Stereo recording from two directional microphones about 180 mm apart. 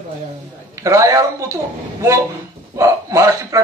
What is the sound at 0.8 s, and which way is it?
Speech, 15° right (ahead or behind).